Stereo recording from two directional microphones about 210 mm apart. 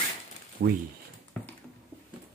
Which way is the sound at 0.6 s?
50° right (ahead or behind).